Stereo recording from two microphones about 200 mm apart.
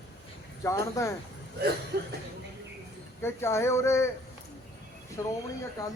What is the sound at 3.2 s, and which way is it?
Speech, 10° left (ahead or behind).